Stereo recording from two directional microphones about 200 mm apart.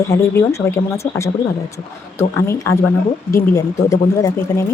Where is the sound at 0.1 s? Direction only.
15° left (ahead or behind).